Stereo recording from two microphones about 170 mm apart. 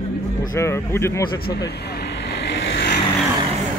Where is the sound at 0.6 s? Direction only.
15° left (ahead or behind).